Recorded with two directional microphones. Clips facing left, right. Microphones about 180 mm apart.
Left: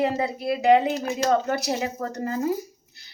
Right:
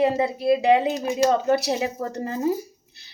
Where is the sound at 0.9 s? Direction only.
15° right (ahead or behind).